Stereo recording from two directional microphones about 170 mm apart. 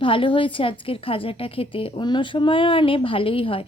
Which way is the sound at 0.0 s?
30° left (ahead or behind).